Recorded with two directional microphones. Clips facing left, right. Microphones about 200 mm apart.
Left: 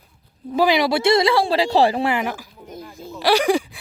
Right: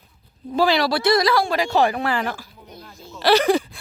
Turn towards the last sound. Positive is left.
turn(degrees=10)  # may be behind; listen again after turning